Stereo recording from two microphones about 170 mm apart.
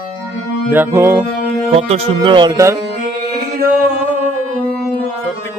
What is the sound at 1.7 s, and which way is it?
Speech, 35° right (ahead or behind).